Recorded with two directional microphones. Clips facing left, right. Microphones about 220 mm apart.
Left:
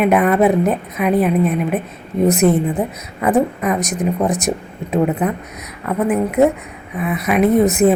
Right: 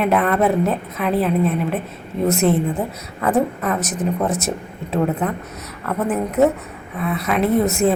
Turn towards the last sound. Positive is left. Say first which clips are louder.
# left 4 dB
turn(degrees=20)  # may be behind; listen again after turning